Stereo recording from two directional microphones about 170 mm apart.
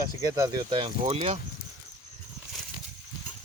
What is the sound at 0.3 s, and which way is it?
Speech, 25° right (ahead or behind).